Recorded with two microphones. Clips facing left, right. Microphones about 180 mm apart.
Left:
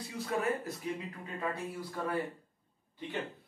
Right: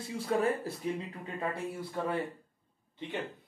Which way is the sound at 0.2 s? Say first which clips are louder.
Right 3 dB; 30° right (ahead or behind).